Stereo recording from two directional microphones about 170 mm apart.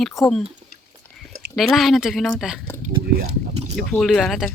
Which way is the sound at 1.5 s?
Centre (ahead or behind).